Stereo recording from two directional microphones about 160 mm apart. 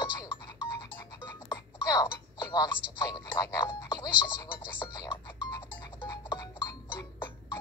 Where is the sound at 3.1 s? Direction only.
25° left (ahead or behind).